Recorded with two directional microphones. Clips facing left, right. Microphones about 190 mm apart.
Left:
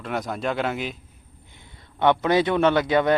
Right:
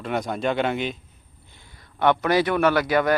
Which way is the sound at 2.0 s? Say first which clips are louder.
Left 1 dB; 20° left (ahead or behind).